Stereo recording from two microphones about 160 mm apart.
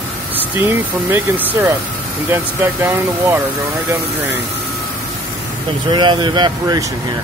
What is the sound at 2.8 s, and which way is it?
Speech, 15° right (ahead or behind).